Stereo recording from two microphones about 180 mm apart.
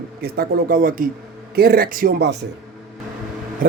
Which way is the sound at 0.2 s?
55° right (ahead or behind).